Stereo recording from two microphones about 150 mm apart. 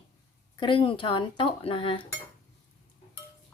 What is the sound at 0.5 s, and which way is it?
Speech, 35° left (ahead or behind).